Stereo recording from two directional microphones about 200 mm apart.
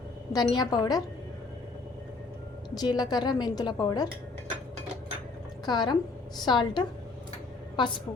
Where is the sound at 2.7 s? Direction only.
20° left (ahead or behind).